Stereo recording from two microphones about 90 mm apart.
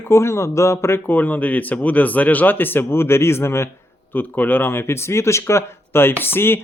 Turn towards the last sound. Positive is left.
turn(degrees=25)  # may be behind; listen again after turning